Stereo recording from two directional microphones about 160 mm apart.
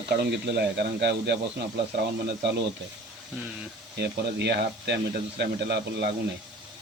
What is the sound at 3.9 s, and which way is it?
Speech, 90° right.